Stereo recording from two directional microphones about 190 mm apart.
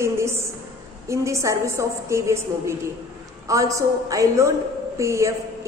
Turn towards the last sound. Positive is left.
turn(degrees=-15)  # may be behind; listen again after turning